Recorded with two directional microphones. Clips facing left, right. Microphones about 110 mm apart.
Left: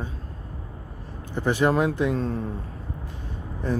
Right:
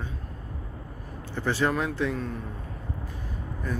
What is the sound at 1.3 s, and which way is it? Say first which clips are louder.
Speech: left 5 dB; 15° left (ahead or behind).